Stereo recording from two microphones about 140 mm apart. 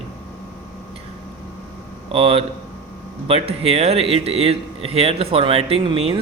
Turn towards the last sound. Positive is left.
turn(degrees=-40)  # may be behind; listen again after turning